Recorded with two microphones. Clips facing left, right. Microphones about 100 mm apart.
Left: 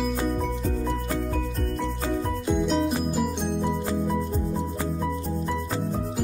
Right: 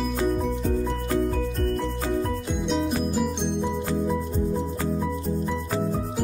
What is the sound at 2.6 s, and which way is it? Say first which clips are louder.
Music: right 3 dB; centre (ahead or behind).